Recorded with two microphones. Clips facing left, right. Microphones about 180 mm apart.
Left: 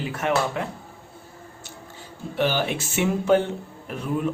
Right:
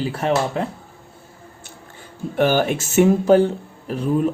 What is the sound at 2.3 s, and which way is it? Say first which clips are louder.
Speech: right 6 dB; 50° right (ahead or behind).